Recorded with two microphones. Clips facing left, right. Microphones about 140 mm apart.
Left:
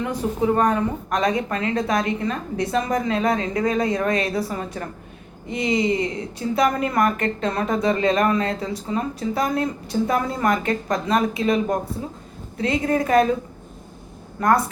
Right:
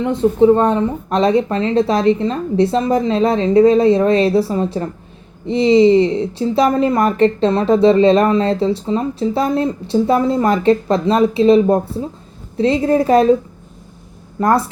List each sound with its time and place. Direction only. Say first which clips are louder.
0.0 s a woman's voice: right 10 dB; 25° right (ahead or behind)
14.4 s a woman's voice: right 4 dB; 30° right (ahead or behind)